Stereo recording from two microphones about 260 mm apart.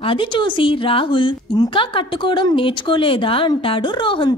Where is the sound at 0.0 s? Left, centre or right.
Centre.